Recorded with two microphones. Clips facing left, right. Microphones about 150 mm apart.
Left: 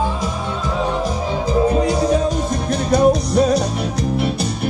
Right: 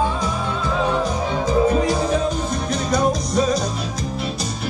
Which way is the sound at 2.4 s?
55° left (ahead or behind).